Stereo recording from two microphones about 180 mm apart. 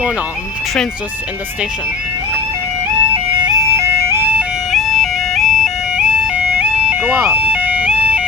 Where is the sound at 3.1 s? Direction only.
20° right (ahead or behind).